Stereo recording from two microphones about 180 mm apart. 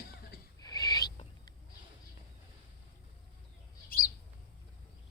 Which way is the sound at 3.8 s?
55° left (ahead or behind).